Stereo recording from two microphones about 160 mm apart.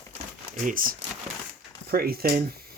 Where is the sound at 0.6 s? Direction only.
55° right (ahead or behind).